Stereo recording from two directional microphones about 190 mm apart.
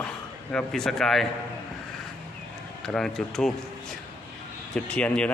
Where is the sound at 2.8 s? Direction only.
5° left (ahead or behind).